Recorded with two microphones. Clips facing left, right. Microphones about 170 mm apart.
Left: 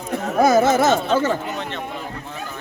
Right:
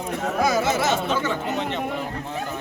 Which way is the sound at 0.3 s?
50° left (ahead or behind).